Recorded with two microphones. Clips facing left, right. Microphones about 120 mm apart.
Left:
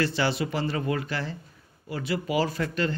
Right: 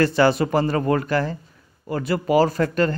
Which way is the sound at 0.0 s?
45° right (ahead or behind).